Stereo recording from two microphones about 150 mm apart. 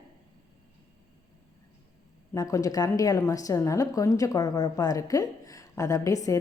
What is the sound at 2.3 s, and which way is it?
A woman's voice, 25° left (ahead or behind).